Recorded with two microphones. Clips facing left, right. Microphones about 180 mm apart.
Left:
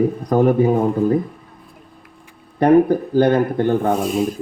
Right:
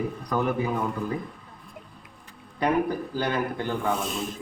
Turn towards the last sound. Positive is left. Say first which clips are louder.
# left 10 dB
turn(degrees=50)  # may be behind; listen again after turning